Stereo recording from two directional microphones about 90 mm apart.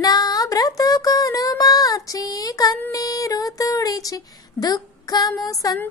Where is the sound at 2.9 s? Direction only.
40° left (ahead or behind).